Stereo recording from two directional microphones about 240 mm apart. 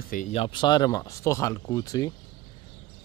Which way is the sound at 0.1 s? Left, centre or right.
Left.